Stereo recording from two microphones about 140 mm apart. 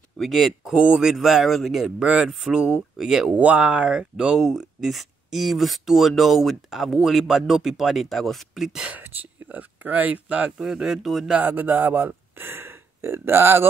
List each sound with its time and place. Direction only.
0.2 s speech: centre (ahead or behind)
11.3 s speech: 15° right (ahead or behind)